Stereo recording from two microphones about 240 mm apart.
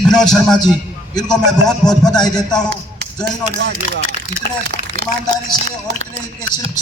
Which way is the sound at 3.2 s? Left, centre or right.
Right.